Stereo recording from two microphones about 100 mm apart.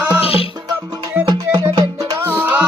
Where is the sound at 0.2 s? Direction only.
70° left (ahead or behind).